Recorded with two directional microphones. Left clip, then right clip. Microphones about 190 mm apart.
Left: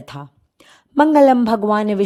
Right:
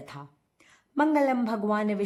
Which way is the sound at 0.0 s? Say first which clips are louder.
Left 8 dB; 40° left (ahead or behind).